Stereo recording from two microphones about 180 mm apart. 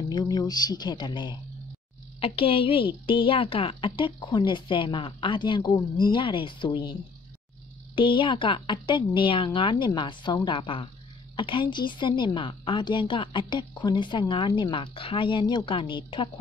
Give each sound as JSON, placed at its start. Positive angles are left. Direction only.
{"t": 0.1, "sound": "a woman's voice", "side_deg": 20}